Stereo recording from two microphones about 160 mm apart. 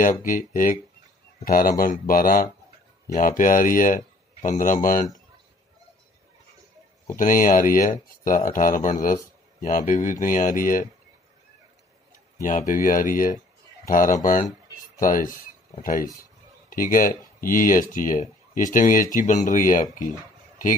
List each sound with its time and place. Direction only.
0.0 s speech: 55° left (ahead or behind)
7.2 s speech: 60° left (ahead or behind)
12.4 s speech: 55° left (ahead or behind)